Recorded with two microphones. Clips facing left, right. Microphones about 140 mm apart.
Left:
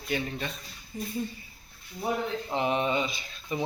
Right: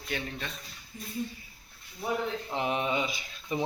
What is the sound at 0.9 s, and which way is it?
Speech, 75° left (ahead or behind).